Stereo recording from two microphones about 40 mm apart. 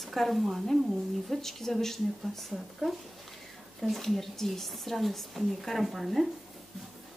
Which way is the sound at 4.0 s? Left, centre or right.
Centre.